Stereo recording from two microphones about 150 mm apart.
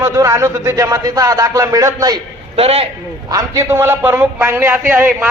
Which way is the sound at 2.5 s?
40° right (ahead or behind).